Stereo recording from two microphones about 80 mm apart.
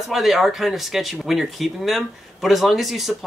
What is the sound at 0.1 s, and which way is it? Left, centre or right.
Speech, centre.